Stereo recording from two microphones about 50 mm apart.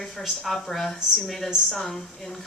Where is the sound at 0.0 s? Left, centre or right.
Centre.